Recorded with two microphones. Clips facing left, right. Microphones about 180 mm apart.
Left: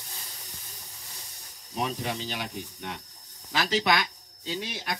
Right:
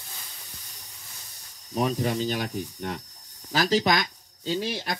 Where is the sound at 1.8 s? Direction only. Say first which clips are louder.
Right 6 dB; 40° right (ahead or behind).